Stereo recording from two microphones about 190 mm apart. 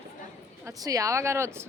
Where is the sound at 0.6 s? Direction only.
20° right (ahead or behind).